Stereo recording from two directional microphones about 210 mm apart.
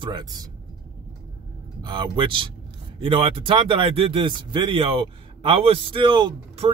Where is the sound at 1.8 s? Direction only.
20° right (ahead or behind).